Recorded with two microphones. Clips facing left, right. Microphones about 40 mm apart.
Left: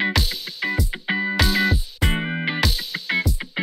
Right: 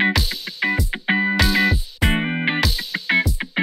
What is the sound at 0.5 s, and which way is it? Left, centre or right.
Music, centre.